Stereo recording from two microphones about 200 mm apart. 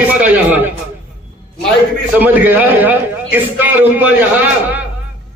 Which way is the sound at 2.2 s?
10° right (ahead or behind).